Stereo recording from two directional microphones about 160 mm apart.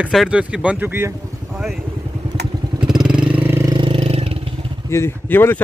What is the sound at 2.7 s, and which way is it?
Vehicle, 5° right (ahead or behind).